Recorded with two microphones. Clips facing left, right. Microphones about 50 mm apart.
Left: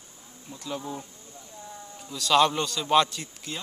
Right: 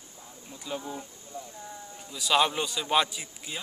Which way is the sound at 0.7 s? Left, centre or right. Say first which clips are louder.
Left 1 dB; centre.